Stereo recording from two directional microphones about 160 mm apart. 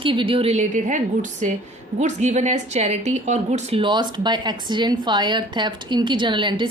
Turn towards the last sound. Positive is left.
turn(degrees=-30)  # may be behind; listen again after turning